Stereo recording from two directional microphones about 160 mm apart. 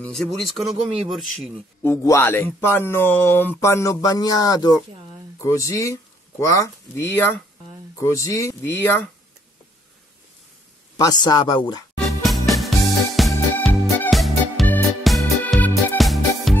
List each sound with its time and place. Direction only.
0.0 s speech: centre (ahead or behind)
1.8 s speech: 15° left (ahead or behind)
11.0 s speech: 25° left (ahead or behind)
12.1 s music: centre (ahead or behind)